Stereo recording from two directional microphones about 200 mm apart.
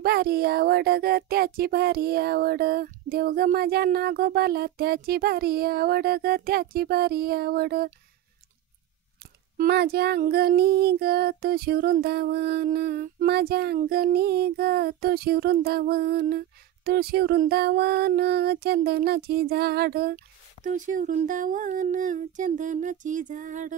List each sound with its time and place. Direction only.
0.0 s child singing: 50° right (ahead or behind)
9.6 s child singing: 50° right (ahead or behind)
20.6 s speech: 40° right (ahead or behind)